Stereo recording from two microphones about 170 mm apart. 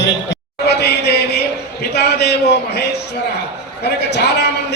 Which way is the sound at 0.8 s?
75° left (ahead or behind).